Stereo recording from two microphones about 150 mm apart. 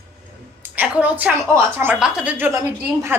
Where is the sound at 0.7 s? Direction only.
10° right (ahead or behind).